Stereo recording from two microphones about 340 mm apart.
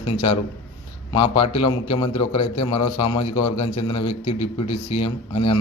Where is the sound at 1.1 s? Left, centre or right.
Centre.